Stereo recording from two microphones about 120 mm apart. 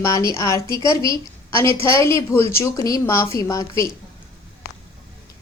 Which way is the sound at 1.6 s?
25° left (ahead or behind).